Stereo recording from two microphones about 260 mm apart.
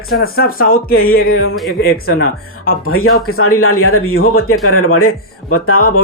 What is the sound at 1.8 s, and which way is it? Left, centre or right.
Speech, left.